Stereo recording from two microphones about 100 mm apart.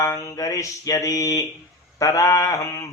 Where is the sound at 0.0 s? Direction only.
30° left (ahead or behind).